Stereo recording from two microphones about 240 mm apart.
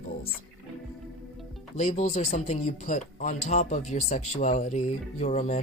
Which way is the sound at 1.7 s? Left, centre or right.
Left.